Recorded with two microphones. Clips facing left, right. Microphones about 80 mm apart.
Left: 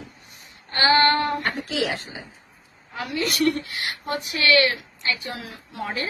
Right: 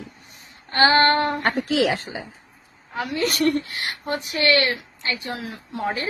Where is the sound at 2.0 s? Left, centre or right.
Right.